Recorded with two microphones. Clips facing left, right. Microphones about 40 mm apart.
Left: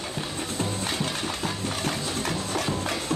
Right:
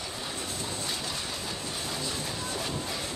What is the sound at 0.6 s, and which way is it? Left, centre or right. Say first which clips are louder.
Music: left 9 dB; left.